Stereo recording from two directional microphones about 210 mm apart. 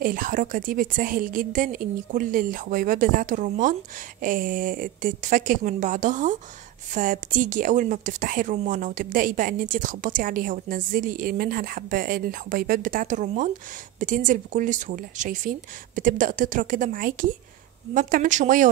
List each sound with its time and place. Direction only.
0.0 s speech: 40° right (ahead or behind)